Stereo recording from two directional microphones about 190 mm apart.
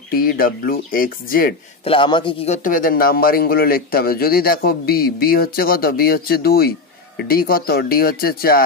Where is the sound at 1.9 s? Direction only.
25° left (ahead or behind).